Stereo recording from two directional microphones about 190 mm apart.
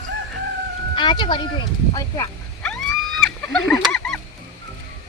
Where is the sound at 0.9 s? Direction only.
25° left (ahead or behind).